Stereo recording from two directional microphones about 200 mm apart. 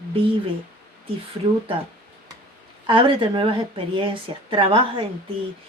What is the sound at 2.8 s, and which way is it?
Speech, 25° right (ahead or behind).